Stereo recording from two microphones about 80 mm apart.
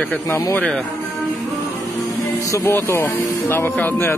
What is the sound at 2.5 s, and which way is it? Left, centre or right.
Speech, left.